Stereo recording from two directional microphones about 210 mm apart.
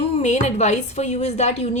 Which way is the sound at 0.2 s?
35° left (ahead or behind).